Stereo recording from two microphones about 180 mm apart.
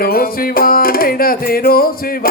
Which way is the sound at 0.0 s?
55° left (ahead or behind).